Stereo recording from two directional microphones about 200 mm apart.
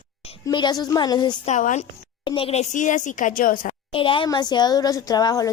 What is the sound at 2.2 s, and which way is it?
A woman's voice, 25° left (ahead or behind).